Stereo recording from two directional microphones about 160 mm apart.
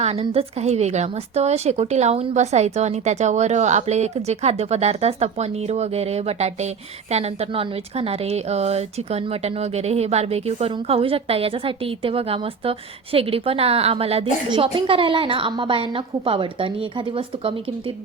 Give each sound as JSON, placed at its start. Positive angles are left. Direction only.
{"t": 0.0, "sound": "a woman's voice", "side_deg": -40}